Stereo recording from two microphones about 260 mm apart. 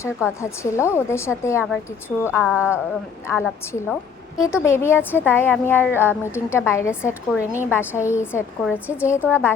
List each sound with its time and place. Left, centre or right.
0.0 s speech: centre
7.3 s a woman's voice: centre
7.7 s speech: centre